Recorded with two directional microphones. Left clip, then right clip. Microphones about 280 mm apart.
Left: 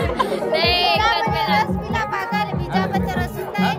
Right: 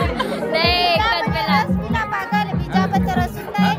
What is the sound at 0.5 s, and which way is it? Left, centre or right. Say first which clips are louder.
Speech: right 1 dB; centre.